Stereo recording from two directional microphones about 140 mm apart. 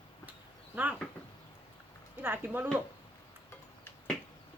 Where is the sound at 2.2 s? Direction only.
15° right (ahead or behind).